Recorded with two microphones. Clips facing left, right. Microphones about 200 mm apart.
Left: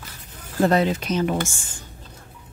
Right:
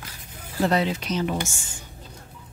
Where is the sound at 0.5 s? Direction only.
45° left (ahead or behind).